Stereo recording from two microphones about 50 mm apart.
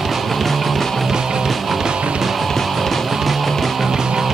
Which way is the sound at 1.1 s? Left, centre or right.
Centre.